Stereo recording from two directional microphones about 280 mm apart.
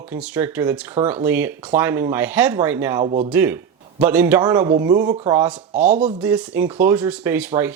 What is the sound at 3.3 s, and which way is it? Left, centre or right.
Speech, centre.